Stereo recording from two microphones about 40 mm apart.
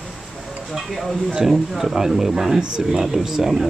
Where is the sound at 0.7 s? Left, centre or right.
Centre.